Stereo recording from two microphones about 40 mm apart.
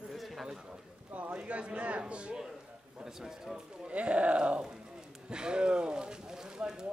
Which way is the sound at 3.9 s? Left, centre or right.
Right.